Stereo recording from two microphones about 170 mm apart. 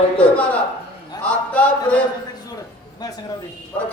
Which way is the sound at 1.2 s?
10° left (ahead or behind).